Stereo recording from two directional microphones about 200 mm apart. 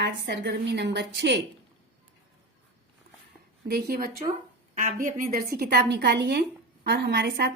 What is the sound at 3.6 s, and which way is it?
A woman's voice, 50° right (ahead or behind).